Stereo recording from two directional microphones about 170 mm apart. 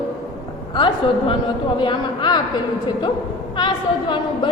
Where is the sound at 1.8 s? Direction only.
25° left (ahead or behind).